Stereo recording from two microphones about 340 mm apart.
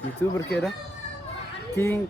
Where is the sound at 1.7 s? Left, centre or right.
Centre.